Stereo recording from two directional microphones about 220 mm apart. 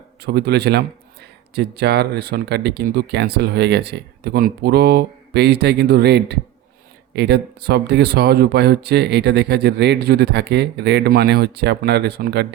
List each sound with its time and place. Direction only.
0.2 s speech: 45° right (ahead or behind)